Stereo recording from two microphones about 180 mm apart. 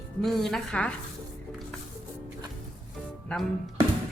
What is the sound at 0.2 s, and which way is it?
Speech, centre (ahead or behind).